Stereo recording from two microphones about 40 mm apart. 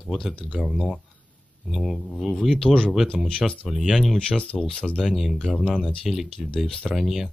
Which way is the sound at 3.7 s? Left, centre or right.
Centre.